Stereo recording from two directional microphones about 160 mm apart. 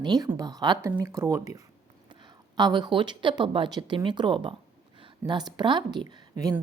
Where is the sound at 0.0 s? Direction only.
25° right (ahead or behind).